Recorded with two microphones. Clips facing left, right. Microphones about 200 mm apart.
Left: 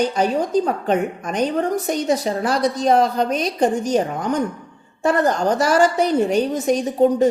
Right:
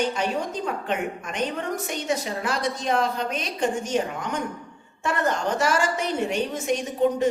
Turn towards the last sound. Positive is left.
turn(degrees=35)  # may be behind; listen again after turning